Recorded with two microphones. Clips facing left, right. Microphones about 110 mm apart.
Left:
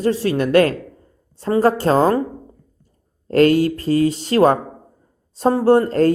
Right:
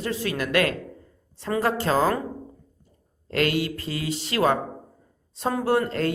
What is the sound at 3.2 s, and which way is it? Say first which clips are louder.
Speech: left 10 dB; 35° left (ahead or behind).